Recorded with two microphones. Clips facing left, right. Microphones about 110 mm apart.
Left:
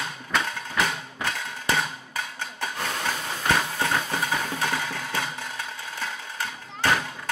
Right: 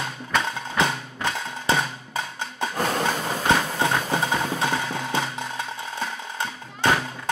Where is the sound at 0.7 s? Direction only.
25° right (ahead or behind).